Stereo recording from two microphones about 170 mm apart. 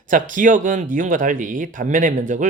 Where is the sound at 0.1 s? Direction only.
50° right (ahead or behind).